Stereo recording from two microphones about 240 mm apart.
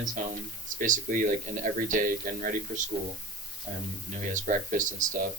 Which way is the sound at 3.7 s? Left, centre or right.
Right.